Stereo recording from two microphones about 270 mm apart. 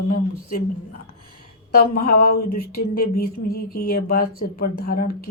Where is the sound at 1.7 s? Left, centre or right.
Left.